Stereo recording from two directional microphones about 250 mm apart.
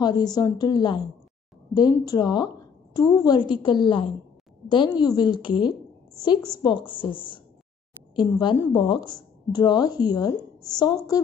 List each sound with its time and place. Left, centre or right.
0.0 s a woman's voice: centre